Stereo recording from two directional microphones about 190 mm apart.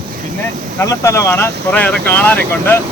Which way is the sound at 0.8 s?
15° left (ahead or behind).